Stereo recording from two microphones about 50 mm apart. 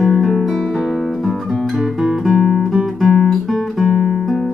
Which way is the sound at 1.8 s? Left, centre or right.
Centre.